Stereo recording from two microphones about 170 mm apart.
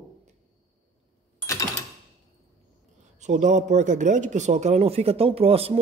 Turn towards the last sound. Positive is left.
turn(degrees=-35)  # may be behind; listen again after turning